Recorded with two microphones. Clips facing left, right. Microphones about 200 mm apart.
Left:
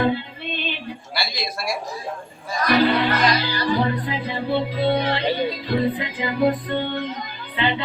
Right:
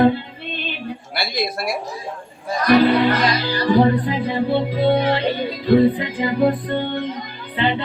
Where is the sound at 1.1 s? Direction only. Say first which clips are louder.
Right 5 dB; 55° right (ahead or behind).